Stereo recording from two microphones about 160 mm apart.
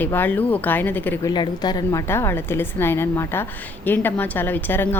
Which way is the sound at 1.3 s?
25° left (ahead or behind).